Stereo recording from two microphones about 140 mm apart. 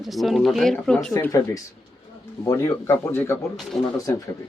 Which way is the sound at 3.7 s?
Centre (ahead or behind).